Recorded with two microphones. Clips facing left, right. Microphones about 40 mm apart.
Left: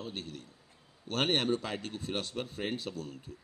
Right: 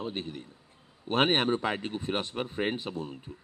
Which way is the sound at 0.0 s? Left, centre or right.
Right.